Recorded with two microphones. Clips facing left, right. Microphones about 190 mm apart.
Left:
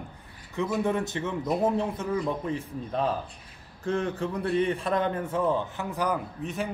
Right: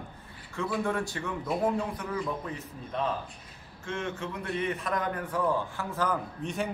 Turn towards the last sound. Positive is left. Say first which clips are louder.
# left 1 dB
turn(degrees=0)  # may be behind; listen again after turning